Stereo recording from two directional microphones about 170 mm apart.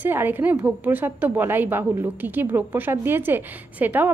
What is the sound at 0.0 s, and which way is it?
A woman's voice, 10° right (ahead or behind).